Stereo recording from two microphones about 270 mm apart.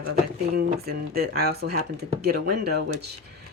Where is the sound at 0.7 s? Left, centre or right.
Right.